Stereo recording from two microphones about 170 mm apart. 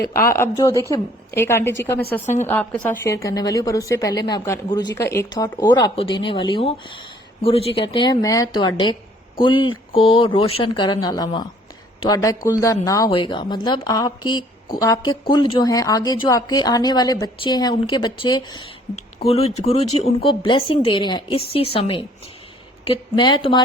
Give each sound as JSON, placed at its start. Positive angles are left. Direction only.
{"t": 0.0, "sound": "a woman's voice", "side_deg": 20}
{"t": 19.2, "sound": "a woman's voice", "side_deg": 35}